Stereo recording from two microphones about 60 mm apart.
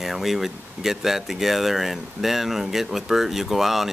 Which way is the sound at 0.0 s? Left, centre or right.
Centre.